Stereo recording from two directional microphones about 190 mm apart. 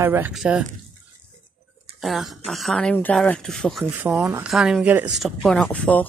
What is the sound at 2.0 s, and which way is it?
Speech, centre (ahead or behind).